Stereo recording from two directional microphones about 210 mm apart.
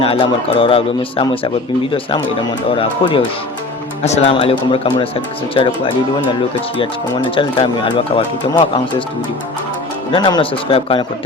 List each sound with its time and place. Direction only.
0.0 s speech: 25° left (ahead or behind)
7.3 s speech: 25° left (ahead or behind)
10.1 s speech: 20° left (ahead or behind)